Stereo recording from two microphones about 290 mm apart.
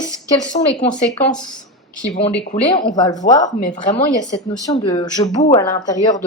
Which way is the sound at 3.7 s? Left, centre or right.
Left.